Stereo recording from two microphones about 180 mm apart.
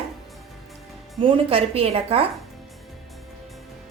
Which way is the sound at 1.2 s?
30° right (ahead or behind).